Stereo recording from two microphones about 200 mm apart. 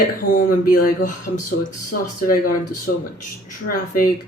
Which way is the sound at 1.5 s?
55° left (ahead or behind).